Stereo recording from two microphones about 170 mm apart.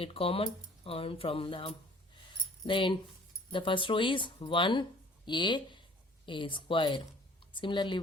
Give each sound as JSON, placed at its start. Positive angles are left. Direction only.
{"t": 0.0, "sound": "speech", "side_deg": 35}